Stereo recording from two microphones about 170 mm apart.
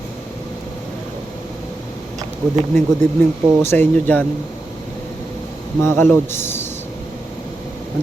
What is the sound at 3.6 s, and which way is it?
Speech, 15° left (ahead or behind).